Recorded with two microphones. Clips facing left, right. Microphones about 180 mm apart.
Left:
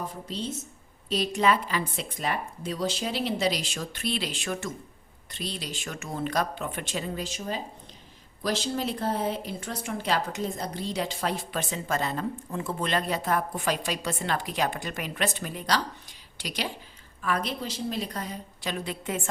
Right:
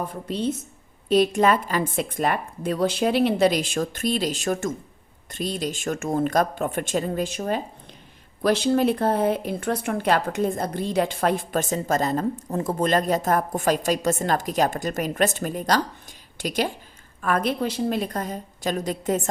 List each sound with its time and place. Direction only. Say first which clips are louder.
0.1 s a woman's voice: right 8 dB; 55° right (ahead or behind); by 19.3 s 40° right (ahead or behind)